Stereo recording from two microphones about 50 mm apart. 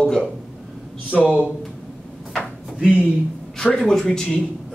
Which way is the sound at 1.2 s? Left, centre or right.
Right.